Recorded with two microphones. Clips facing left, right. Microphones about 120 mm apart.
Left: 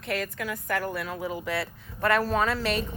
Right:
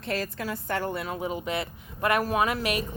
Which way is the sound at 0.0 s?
35° right (ahead or behind).